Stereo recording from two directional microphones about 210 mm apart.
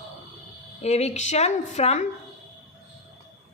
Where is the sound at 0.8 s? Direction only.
30° left (ahead or behind).